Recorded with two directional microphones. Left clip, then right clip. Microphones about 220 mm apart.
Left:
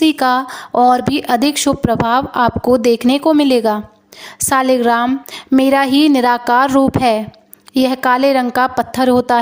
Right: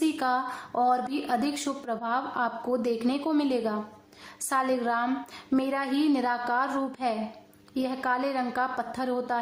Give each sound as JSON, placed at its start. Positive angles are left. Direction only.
{"t": 0.0, "sound": "a woman's voice", "side_deg": 45}